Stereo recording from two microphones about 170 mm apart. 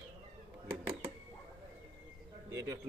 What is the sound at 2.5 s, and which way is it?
Bird, 20° right (ahead or behind).